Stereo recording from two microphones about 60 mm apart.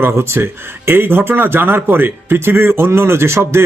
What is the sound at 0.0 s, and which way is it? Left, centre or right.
Speech, right.